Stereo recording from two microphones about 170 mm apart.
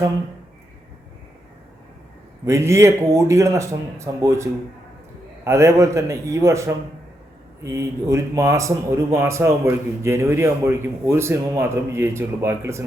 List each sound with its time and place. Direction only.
2.4 s a man's voice: 15° right (ahead or behind)
5.5 s a man's voice: 15° right (ahead or behind)